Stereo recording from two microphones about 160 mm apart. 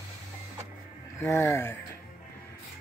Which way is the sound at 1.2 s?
20° left (ahead or behind).